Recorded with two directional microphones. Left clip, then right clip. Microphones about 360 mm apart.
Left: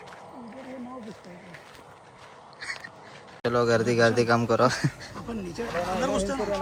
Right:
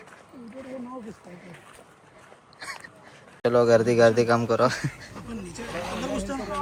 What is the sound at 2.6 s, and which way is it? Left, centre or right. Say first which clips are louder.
Duck: left 2 dB; centre.